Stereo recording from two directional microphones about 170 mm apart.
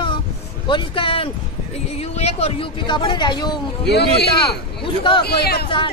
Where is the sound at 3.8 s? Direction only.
75° left (ahead or behind).